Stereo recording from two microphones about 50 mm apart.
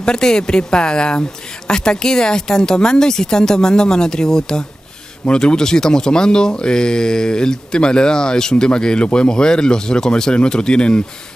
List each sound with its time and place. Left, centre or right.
0.0 s speech: centre